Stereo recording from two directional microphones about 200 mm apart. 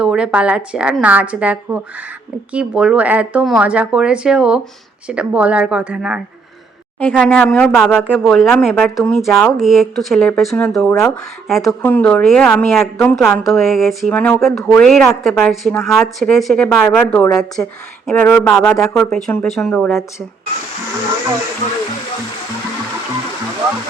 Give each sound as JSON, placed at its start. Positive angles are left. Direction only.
{"t": 0.0, "sound": "a woman's voice", "side_deg": -5}
{"t": 7.0, "sound": "speech", "side_deg": 10}